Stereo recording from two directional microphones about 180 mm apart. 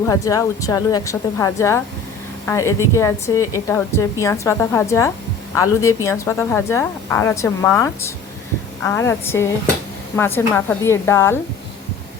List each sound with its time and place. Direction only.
0.1 s a woman's voice: 20° left (ahead or behind)